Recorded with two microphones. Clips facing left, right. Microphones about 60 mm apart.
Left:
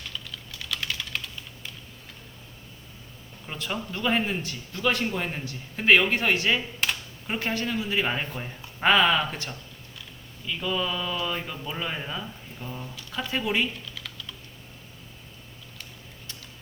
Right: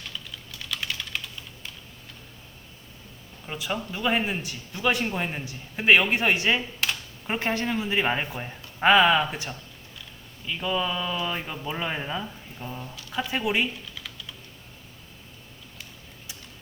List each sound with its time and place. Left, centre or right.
0.3 s typing: centre
3.4 s speech: centre
6.6 s a sound: centre
7.3 s speech: right
13.9 s typing: centre
15.8 s a sound: centre